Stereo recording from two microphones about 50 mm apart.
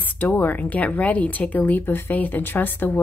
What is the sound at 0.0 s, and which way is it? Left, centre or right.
A woman's voice, left.